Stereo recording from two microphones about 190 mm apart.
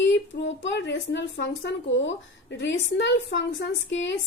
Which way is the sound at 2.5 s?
70° left (ahead or behind).